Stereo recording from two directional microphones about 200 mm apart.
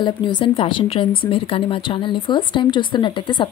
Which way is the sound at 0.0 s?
20° left (ahead or behind).